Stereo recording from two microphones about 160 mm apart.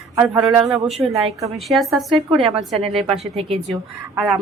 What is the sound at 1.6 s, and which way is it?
Speech, centre (ahead or behind).